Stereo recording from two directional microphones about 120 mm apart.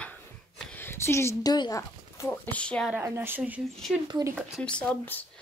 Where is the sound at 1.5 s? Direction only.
30° left (ahead or behind); by 2.9 s 10° left (ahead or behind).